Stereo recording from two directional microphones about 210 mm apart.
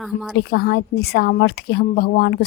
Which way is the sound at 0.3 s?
50° left (ahead or behind).